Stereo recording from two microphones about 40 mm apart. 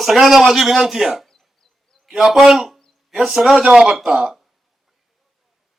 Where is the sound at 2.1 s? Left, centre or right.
Centre.